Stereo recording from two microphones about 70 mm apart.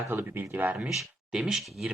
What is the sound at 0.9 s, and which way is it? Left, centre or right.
Speech, centre.